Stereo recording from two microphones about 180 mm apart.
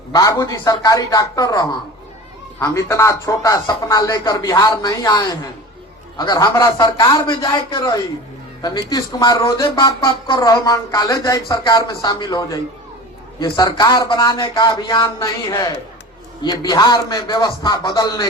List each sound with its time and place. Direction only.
0.1 s speech: 20° left (ahead or behind)